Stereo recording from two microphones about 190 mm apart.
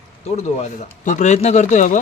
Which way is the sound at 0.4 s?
40° left (ahead or behind).